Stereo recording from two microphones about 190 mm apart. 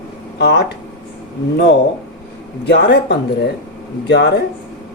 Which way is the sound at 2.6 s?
60° left (ahead or behind).